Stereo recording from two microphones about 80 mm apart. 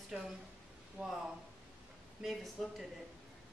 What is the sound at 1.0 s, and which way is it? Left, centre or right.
Speech, centre.